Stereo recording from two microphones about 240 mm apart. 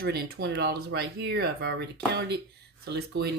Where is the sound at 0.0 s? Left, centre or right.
Right.